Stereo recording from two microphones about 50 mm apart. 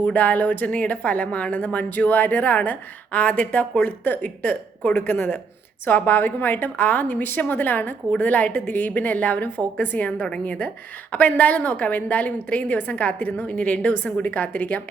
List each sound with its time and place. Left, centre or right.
0.0 s a woman's voice: left
10.1 s a woman's voice: centre
11.1 s a woman's voice: left